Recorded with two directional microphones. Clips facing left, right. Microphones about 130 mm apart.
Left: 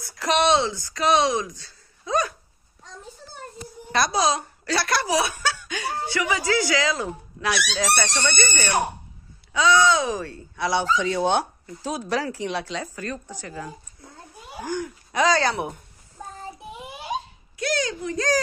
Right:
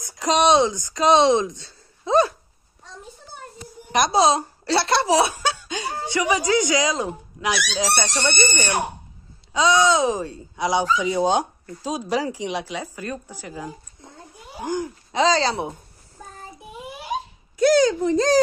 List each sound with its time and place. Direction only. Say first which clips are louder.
0.0 s speech: right 2 dB; 20° right (ahead or behind)
3.9 s speech: right 4 dB; 20° right (ahead or behind)
14.6 s speech: right 3 dB; 25° right (ahead or behind)
18.0 s speech: right 6 dB; 30° right (ahead or behind)